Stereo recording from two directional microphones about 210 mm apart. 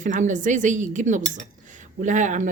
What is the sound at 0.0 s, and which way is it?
Speech, 35° right (ahead or behind).